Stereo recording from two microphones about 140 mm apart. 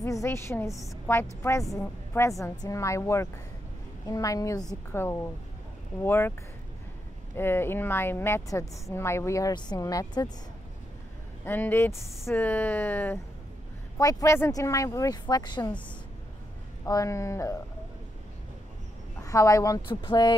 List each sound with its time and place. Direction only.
0.0 s a woman's voice: 20° left (ahead or behind)
7.3 s a woman's voice: 15° left (ahead or behind)
11.4 s a woman's voice: 15° left (ahead or behind); by 15.7 s 30° left (ahead or behind)
16.8 s a woman's voice: 25° left (ahead or behind)
19.2 s a woman's voice: 25° left (ahead or behind)